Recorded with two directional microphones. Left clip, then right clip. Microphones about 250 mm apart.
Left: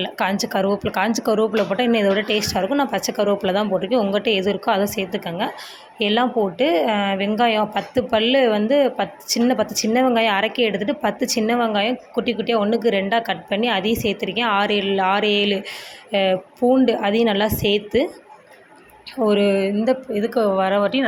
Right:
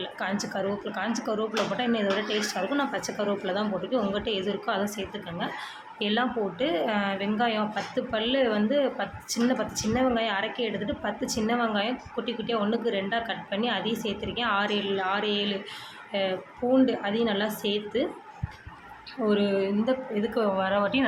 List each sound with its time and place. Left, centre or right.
0.0 s a woman's voice: left
19.2 s a woman's voice: left